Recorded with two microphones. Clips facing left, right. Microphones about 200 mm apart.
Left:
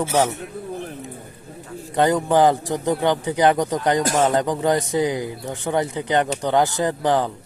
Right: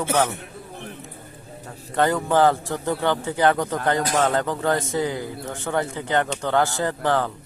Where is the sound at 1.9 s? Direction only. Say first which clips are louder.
Left 2 dB; 15° left (ahead or behind).